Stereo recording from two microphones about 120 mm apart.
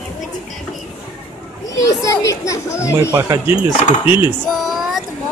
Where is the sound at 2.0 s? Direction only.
25° left (ahead or behind).